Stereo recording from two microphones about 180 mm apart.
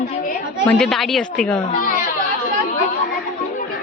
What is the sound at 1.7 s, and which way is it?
Speech, 50° left (ahead or behind).